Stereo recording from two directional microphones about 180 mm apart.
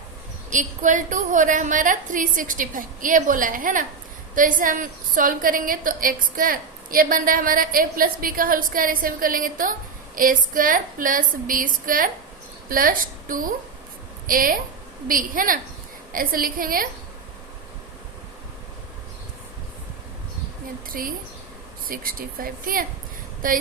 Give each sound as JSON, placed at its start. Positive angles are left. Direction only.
{"t": 0.5, "sound": "a woman's voice", "side_deg": -45}
{"t": 20.9, "sound": "a woman's voice", "side_deg": -55}